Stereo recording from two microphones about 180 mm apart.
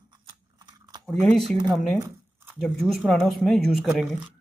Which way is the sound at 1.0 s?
Centre (ahead or behind).